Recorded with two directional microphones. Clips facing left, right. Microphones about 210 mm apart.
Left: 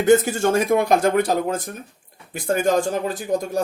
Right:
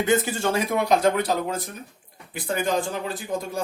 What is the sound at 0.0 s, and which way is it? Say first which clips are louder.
Speech: left 6 dB; 45° left (ahead or behind).